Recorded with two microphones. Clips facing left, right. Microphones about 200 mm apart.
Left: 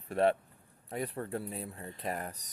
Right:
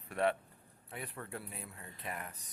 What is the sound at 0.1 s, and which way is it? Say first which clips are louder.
A man's voice: left 5 dB; 30° left (ahead or behind).